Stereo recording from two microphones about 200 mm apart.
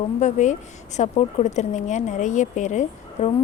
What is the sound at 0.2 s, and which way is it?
Speech, 35° left (ahead or behind).